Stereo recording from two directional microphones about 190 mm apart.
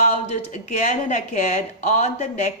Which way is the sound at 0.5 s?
45° left (ahead or behind).